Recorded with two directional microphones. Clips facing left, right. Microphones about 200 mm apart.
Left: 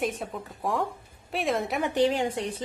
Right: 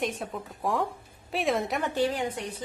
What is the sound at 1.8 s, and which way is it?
Speech, 20° left (ahead or behind).